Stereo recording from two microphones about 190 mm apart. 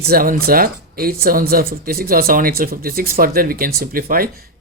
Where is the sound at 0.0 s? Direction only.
50° right (ahead or behind).